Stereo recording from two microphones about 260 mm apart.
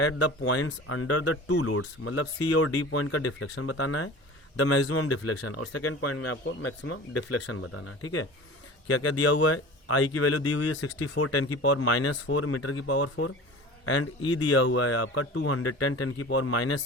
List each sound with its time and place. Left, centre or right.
0.0 s speech: left
8.9 s speech: left